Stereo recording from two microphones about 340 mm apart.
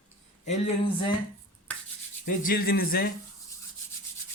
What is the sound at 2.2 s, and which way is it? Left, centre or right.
Speech, left.